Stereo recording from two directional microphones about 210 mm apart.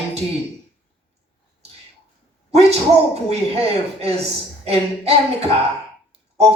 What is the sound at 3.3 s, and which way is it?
Speech, 30° right (ahead or behind).